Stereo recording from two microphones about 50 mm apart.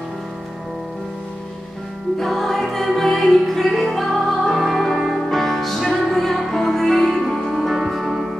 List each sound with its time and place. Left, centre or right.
2.1 s music: centre